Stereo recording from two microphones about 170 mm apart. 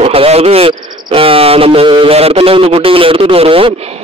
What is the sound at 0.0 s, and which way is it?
Speech, 35° right (ahead or behind).